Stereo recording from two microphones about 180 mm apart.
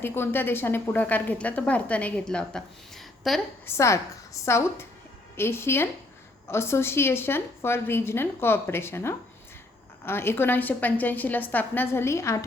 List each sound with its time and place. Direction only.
0.0 s a woman's voice: 10° left (ahead or behind)
3.8 s a woman's voice: 15° left (ahead or behind)